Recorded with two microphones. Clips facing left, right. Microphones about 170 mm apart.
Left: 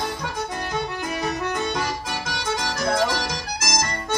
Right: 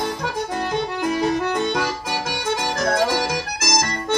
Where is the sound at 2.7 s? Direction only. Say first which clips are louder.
Right 2 dB; 50° right (ahead or behind).